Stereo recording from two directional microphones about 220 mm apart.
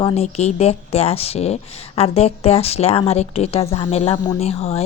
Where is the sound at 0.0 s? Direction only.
25° left (ahead or behind).